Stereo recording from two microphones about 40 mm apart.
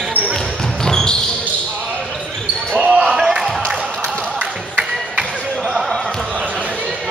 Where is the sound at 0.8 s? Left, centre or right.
Centre.